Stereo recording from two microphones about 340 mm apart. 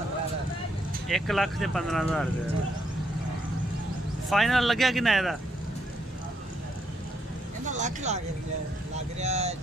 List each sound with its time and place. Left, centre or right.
1.0 s speech: centre
4.3 s speech: centre
7.6 s speech: right
9.2 s speech: centre